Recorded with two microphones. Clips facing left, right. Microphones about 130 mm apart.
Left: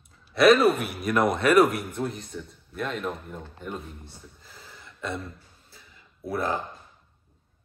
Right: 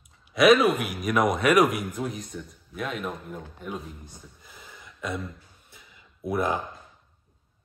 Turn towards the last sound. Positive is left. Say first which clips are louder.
# right 2 dB
turn(degrees=-20)  # may be behind; listen again after turning